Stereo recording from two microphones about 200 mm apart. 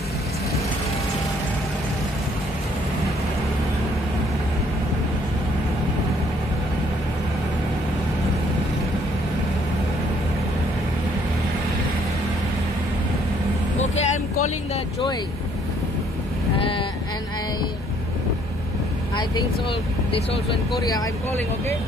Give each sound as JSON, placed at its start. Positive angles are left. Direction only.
{"t": 13.7, "sound": "vehicle", "side_deg": 35}